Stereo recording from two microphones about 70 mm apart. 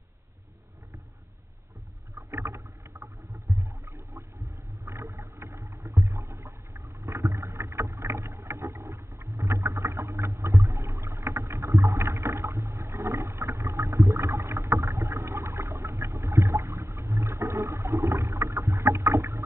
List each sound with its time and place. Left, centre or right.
2.3 s boat: right
3.5 s a sound: right
5.2 s boat: right
5.8 s rowboat: right
6.3 s water: right
7.2 s boat: right
11.1 s boat: right
12.0 s rowboat: right
19.1 s boat: right